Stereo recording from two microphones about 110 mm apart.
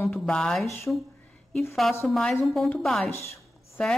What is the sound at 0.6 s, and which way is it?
Speech, 25° left (ahead or behind).